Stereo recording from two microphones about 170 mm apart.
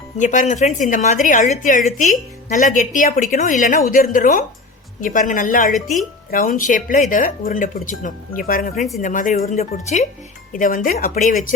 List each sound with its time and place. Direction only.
0.2 s a woman's voice: 45° left (ahead or behind)